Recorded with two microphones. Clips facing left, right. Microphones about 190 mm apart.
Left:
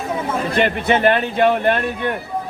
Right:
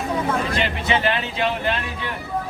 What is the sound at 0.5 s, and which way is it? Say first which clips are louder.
Speech: left 5 dB; 55° left (ahead or behind).